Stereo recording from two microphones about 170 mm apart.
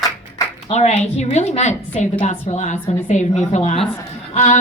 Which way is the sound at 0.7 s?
40° left (ahead or behind).